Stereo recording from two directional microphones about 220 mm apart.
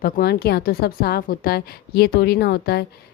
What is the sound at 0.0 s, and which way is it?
A woman's voice, 45° left (ahead or behind).